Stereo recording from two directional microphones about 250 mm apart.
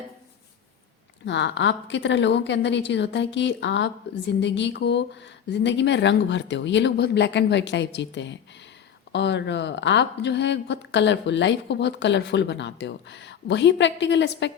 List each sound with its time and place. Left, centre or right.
1.2 s a woman's voice: left